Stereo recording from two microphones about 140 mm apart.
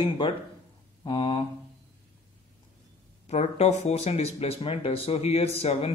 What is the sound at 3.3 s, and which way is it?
Speech, 50° left (ahead or behind).